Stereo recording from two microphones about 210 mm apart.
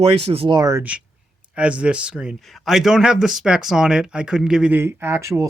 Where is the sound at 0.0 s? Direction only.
25° right (ahead or behind).